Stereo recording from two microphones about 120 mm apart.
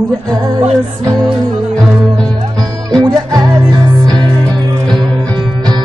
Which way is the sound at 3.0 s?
30° right (ahead or behind).